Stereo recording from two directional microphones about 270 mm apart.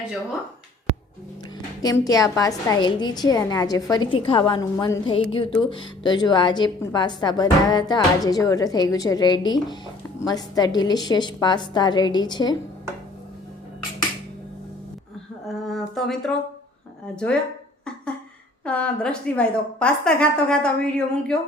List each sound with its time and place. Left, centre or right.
1.8 s a woman's voice: centre
15.4 s a sound: centre
18.6 s a woman's voice: centre